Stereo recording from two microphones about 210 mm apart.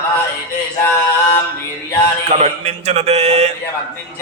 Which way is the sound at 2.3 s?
30° right (ahead or behind).